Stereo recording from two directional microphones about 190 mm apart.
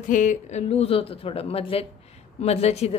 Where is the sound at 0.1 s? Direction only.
40° left (ahead or behind).